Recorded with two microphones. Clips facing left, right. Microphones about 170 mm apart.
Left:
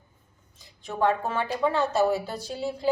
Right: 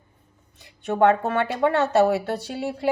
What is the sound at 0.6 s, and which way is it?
A woman's voice, 70° right (ahead or behind).